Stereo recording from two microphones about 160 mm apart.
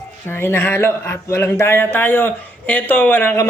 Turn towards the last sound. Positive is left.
turn(degrees=15)  # may be behind; listen again after turning